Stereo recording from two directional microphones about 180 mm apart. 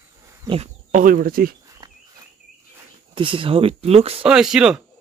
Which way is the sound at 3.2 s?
30° right (ahead or behind).